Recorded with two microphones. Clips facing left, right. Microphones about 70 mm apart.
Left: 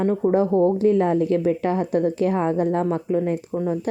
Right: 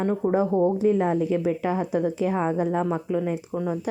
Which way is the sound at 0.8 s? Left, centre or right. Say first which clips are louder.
Left 3 dB; left.